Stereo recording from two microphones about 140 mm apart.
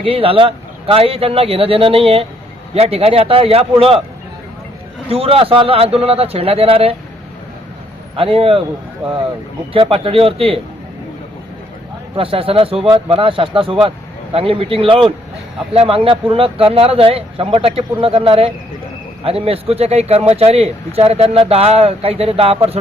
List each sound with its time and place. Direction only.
0.0 s speech: 40° right (ahead or behind)
5.1 s speech: 40° right (ahead or behind)
8.1 s speech: 40° right (ahead or behind)
9.7 s speech: 40° right (ahead or behind)
12.1 s speech: 40° right (ahead or behind)